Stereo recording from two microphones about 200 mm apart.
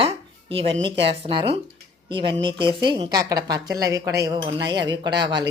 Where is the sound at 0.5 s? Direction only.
25° right (ahead or behind).